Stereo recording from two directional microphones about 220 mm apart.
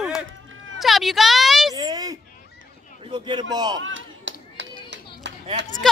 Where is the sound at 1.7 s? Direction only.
15° right (ahead or behind).